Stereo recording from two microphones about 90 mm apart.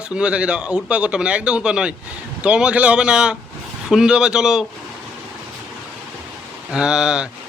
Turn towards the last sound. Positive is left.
turn(degrees=-10)  # may be behind; listen again after turning